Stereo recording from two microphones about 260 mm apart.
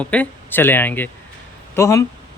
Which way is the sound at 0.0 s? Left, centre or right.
Centre.